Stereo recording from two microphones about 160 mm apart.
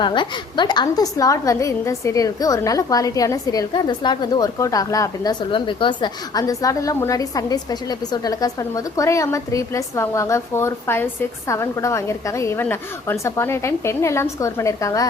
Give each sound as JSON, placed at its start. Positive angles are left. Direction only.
{"t": 0.0, "sound": "a woman's voice", "side_deg": 30}